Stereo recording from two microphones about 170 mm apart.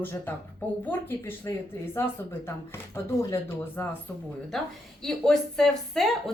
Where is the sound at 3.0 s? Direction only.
15° left (ahead or behind).